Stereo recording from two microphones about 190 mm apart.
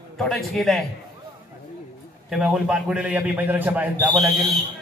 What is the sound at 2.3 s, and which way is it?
A man's voice, centre (ahead or behind).